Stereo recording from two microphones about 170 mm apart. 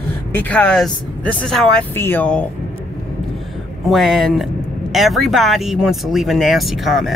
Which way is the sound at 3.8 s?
Centre (ahead or behind).